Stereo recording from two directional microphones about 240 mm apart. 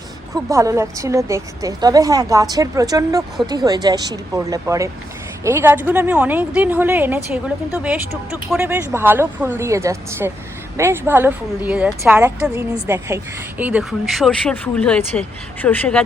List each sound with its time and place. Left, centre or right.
0.4 s a woman's voice: centre